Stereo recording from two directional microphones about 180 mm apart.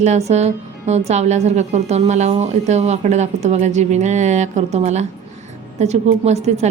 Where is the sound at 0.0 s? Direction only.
40° right (ahead or behind).